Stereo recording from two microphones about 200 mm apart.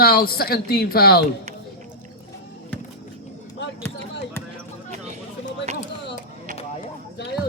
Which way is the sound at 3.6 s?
60° left (ahead or behind).